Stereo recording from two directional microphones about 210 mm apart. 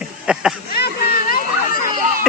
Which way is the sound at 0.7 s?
45° left (ahead or behind).